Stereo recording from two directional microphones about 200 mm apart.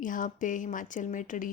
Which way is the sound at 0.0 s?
40° left (ahead or behind).